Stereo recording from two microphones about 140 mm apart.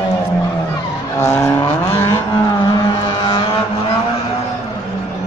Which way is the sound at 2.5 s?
30° left (ahead or behind).